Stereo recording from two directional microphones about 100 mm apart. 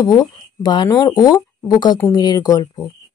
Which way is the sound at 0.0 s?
40° left (ahead or behind).